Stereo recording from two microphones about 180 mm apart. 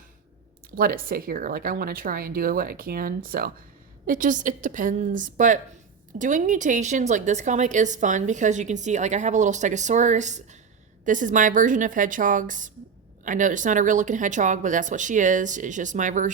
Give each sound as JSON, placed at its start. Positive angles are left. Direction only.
{"t": 0.8, "sound": "a woman's voice", "side_deg": -55}